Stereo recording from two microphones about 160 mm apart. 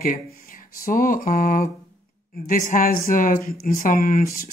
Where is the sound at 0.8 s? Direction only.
60° left (ahead or behind).